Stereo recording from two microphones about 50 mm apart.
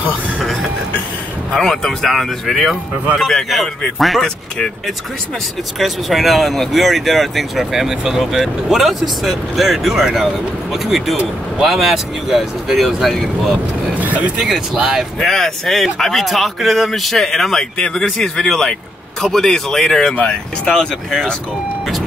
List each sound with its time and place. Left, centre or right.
0.4 s a sound: centre
1.5 s speech: centre
5.8 s speech: centre
13.9 s vehicle: right
14.4 s speech: centre
15.1 s speech: centre